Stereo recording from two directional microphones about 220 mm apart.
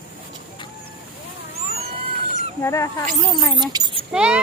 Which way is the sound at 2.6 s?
15° left (ahead or behind).